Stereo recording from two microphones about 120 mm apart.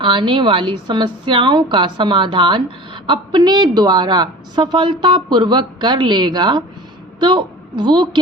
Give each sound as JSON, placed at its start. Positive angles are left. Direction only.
{"t": 0.0, "sound": "a woman's voice", "side_deg": -45}